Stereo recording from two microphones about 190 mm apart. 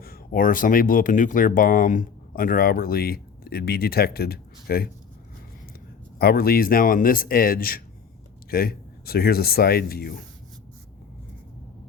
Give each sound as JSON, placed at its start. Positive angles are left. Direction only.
{"t": 0.0, "sound": "speech", "side_deg": 50}
{"t": 6.1, "sound": "speech", "side_deg": 55}